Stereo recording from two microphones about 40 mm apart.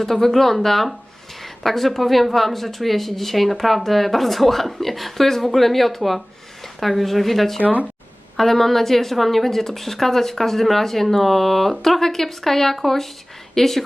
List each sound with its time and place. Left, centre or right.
0.0 s a woman's voice: centre
7.6 s speech: right
8.4 s a woman's voice: centre